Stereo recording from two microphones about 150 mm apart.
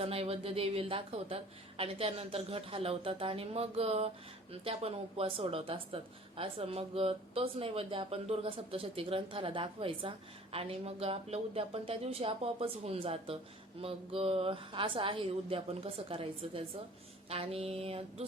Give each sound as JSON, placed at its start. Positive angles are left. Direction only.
{"t": 0.0, "sound": "speech", "side_deg": -40}